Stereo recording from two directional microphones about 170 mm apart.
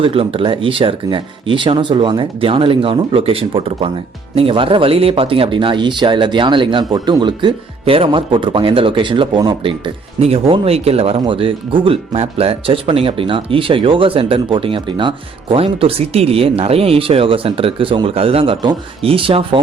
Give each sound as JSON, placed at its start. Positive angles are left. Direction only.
{"t": 0.0, "sound": "speech", "side_deg": -30}